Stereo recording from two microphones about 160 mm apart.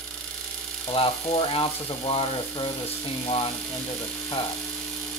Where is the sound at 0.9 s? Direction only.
35° left (ahead or behind).